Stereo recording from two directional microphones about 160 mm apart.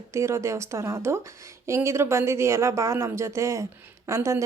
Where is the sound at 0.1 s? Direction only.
15° right (ahead or behind).